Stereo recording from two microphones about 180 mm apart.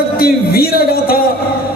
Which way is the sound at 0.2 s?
60° left (ahead or behind).